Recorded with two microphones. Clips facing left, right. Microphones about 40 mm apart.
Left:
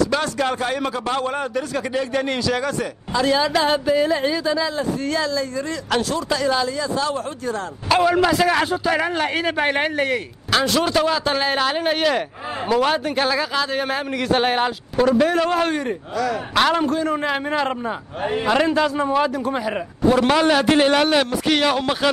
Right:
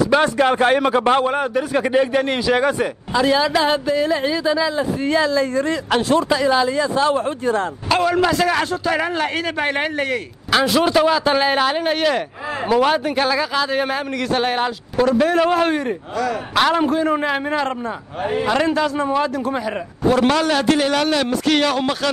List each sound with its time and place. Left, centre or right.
0.1 s a man's voice: right
1.2 s a man's voice: centre
3.1 s a man's voice: centre
5.0 s speech: right
5.4 s a man's voice: right
6.2 s speech: centre
7.9 s a man's voice: centre
10.5 s a man's voice: centre
14.3 s a man's voice: centre
20.6 s speech: left